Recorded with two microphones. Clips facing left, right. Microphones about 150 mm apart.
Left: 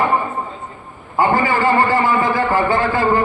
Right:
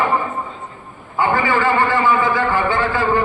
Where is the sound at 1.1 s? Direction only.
40° left (ahead or behind).